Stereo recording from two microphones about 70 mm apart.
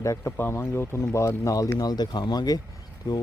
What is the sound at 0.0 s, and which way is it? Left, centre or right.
Speech, left.